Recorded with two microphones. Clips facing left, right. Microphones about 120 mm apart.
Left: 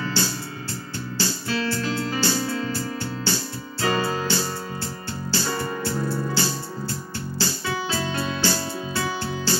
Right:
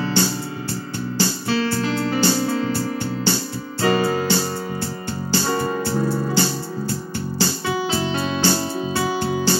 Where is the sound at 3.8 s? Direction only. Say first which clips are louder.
Right 5 dB; 25° right (ahead or behind).